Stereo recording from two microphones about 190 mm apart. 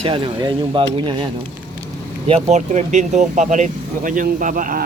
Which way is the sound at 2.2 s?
35° right (ahead or behind).